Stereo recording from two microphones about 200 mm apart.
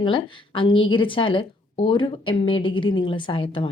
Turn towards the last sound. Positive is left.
turn(degrees=25)  # may be behind; listen again after turning